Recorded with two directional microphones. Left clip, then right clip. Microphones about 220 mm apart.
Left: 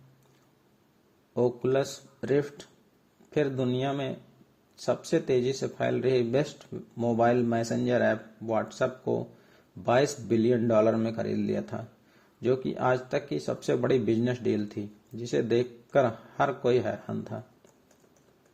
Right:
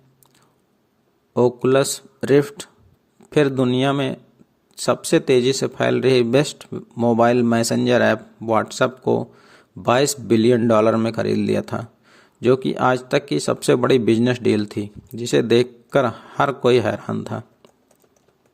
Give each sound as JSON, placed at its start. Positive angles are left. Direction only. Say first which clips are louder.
{"t": 1.3, "sound": "speech", "louder": "right 10 dB", "side_deg": -30}